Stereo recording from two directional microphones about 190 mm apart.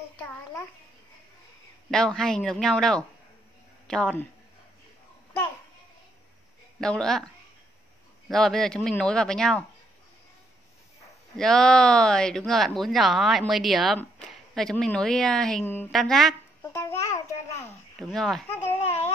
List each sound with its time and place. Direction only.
1.9 s speech: 5° left (ahead or behind)
6.8 s speech: 5° left (ahead or behind)
8.3 s speech: centre (ahead or behind)
11.3 s speech: 5° left (ahead or behind)
16.6 s babbling: 15° left (ahead or behind)
17.6 s a sound: centre (ahead or behind)